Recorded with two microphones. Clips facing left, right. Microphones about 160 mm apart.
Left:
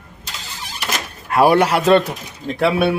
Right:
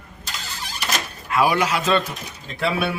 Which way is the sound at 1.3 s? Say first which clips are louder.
Left 6 dB; 55° left (ahead or behind).